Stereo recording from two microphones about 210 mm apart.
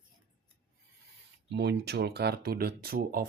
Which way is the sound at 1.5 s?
55° right (ahead or behind).